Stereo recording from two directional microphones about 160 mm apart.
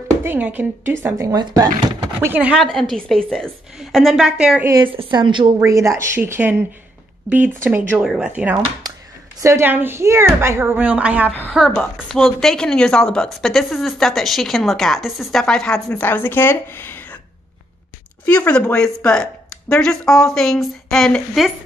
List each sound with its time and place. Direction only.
0.2 s speech: 10° right (ahead or behind)
2.2 s a woman's voice: 10° right (ahead or behind)
4.8 s a woman's voice: 30° right (ahead or behind)
5.6 s a woman's voice: 20° right (ahead or behind); by 17.2 s 10° left (ahead or behind)
18.2 s a woman's voice: 10° left (ahead or behind)